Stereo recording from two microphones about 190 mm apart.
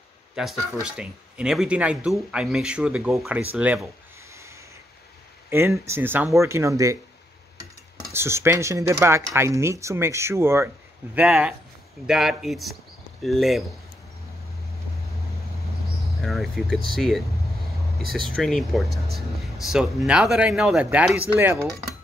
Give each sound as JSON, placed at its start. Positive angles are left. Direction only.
{"t": 0.8, "sound": "speech", "side_deg": -5}
{"t": 4.3, "sound": "snort", "side_deg": -15}
{"t": 5.5, "sound": "speech", "side_deg": -15}
{"t": 8.1, "sound": "speech", "side_deg": -15}
{"t": 16.2, "sound": "speech", "side_deg": 0}